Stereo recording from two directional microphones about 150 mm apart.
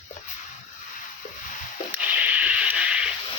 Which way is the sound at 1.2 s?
55° left (ahead or behind).